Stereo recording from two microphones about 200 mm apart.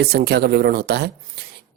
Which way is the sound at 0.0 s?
50° right (ahead or behind).